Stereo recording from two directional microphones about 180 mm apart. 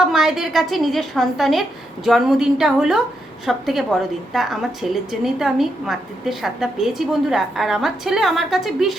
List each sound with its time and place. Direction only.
0.0 s a woman's voice: 5° right (ahead or behind)